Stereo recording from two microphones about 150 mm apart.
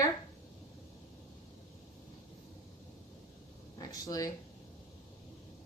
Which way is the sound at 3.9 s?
25° left (ahead or behind).